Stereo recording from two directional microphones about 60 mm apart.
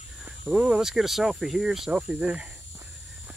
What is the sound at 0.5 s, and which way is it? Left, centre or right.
Speech, centre.